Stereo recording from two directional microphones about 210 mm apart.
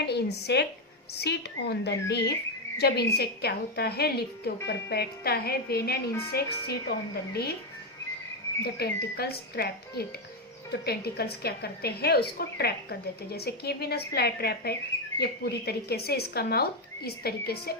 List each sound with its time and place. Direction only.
0.0 s a woman's voice: 50° left (ahead or behind)
8.6 s a woman's voice: 50° left (ahead or behind)